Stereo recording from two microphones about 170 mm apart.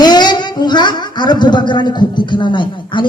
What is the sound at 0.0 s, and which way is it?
Speech, 25° left (ahead or behind).